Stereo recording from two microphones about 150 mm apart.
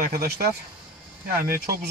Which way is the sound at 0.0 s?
80° right.